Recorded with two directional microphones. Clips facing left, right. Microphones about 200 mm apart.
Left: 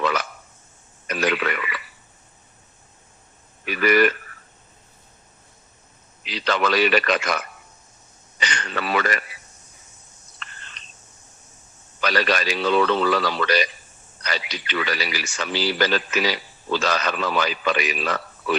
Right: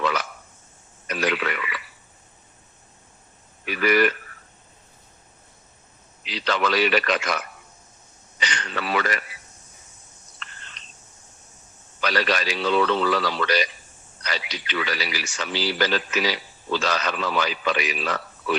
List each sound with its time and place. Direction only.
1.0 s radio: 50° left (ahead or behind)
3.7 s a man's voice: 50° left (ahead or behind)
6.2 s a man's voice: 50° left (ahead or behind)
8.4 s a sound: 50° left (ahead or behind)
12.0 s speech: 50° left (ahead or behind)